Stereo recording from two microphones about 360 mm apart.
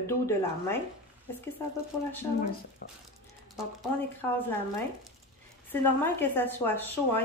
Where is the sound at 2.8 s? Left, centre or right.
Left.